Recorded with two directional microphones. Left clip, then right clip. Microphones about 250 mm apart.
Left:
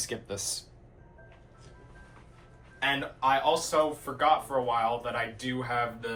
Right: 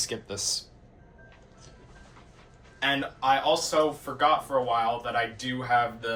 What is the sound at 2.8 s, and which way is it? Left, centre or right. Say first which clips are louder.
Speech: right 2 dB; centre.